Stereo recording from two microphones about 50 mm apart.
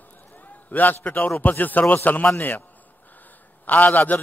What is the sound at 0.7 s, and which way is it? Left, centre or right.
Speech, left.